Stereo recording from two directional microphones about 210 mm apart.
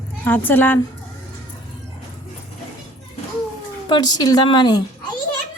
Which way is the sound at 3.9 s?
20° left (ahead or behind).